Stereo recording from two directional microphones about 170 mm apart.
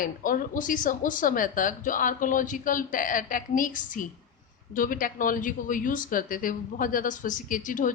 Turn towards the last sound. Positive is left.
turn(degrees=50)  # may be behind; listen again after turning